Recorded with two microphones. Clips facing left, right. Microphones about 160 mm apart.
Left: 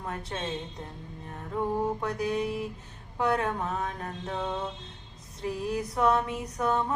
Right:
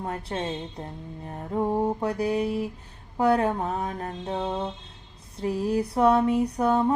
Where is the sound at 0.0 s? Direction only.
30° right (ahead or behind).